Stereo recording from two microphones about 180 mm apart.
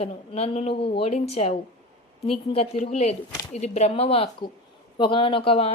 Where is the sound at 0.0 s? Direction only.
35° left (ahead or behind).